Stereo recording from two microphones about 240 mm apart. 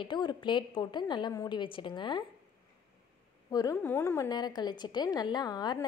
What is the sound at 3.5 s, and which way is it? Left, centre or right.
A woman's voice, centre.